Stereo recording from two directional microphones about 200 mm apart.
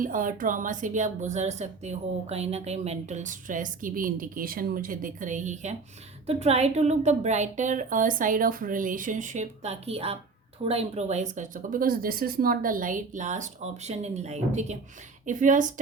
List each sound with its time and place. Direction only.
0.0 s speech: 40° right (ahead or behind)